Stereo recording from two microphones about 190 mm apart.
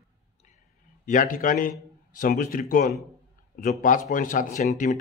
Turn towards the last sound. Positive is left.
turn(degrees=40)  # may be behind; listen again after turning